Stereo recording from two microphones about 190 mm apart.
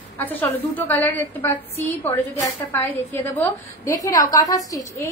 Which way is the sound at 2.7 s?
10° left (ahead or behind).